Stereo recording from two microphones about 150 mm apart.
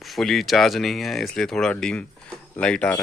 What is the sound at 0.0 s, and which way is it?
Speech, centre (ahead or behind).